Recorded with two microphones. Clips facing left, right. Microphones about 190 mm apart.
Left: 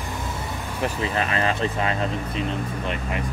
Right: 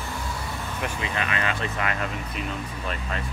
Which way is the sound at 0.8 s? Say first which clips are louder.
Left 6 dB; 35° left (ahead or behind).